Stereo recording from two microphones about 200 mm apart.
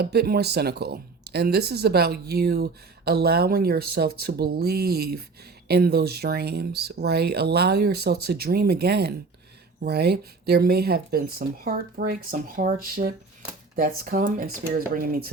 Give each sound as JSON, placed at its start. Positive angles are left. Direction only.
{"t": 0.0, "sound": "speech", "side_deg": -50}